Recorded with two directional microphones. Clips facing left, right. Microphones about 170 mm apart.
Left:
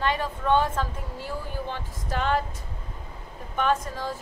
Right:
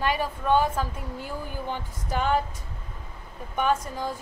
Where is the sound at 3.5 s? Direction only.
15° right (ahead or behind).